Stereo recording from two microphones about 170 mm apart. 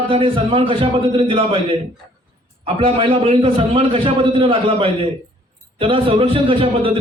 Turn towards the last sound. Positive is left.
turn(degrees=-30)  # may be behind; listen again after turning